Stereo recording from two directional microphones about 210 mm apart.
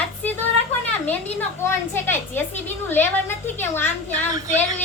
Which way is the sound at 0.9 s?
10° left (ahead or behind).